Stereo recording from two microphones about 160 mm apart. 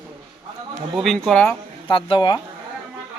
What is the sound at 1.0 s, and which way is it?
Speech, centre (ahead or behind).